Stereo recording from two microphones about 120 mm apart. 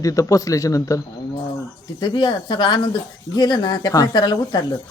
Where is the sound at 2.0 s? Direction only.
40° left (ahead or behind).